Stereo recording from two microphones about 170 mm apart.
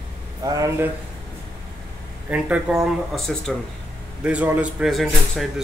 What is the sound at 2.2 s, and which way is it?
Speech, 10° right (ahead or behind).